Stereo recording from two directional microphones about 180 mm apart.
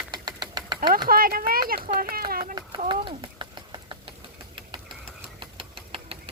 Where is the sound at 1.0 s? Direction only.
55° right (ahead or behind).